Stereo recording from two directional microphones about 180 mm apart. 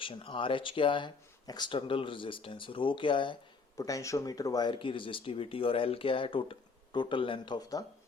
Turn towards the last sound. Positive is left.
turn(degrees=25)  # may be behind; listen again after turning